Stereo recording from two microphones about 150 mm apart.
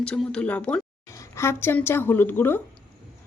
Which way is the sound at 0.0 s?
5° left (ahead or behind).